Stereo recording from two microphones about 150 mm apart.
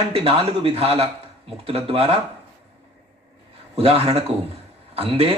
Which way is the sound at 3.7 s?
40° right (ahead or behind).